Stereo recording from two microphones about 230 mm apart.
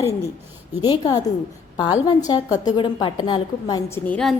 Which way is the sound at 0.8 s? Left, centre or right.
Centre.